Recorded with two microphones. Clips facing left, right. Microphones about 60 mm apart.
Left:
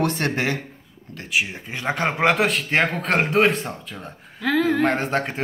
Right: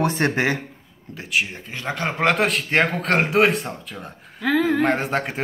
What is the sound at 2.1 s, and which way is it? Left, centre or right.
A man's voice, centre.